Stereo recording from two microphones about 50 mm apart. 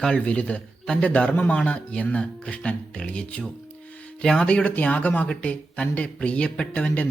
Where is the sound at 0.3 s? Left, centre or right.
Left.